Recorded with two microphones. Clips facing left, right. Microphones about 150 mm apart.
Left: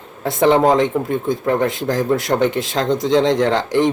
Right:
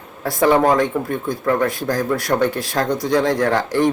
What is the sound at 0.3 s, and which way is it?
Speech, 20° left (ahead or behind).